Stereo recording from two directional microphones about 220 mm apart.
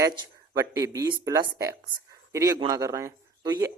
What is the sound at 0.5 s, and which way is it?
Speech, 15° right (ahead or behind).